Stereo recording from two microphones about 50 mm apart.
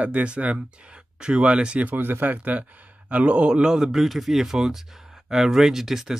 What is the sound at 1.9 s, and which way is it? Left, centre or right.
A man's voice, right.